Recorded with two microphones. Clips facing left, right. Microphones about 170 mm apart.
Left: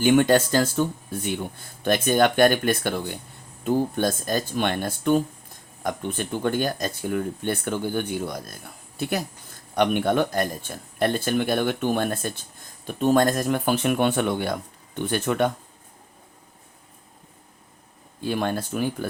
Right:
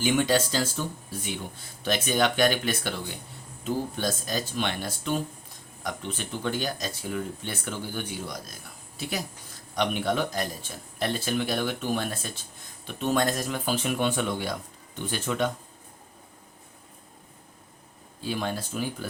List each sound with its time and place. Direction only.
0.0 s speech: 55° left (ahead or behind)
1.8 s speech: 50° left (ahead or behind)
18.2 s speech: 55° left (ahead or behind)